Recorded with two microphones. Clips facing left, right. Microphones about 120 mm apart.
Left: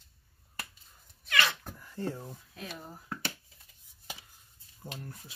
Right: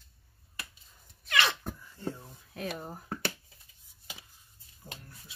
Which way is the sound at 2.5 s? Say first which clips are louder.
Right 9 dB; 55° right (ahead or behind).